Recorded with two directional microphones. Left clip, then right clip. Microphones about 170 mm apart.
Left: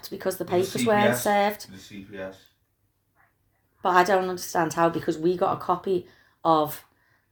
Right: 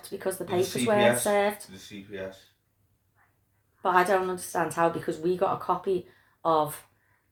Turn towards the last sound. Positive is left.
turn(degrees=45)  # may be behind; listen again after turning